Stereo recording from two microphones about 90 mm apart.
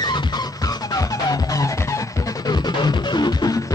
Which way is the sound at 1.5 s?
35° left (ahead or behind).